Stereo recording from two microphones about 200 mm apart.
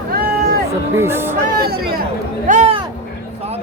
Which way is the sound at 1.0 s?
10° right (ahead or behind).